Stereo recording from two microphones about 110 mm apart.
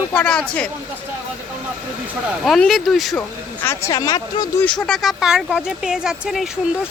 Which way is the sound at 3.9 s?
35° left (ahead or behind).